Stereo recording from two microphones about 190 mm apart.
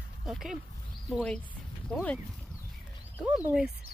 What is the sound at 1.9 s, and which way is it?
Speech, 5° left (ahead or behind).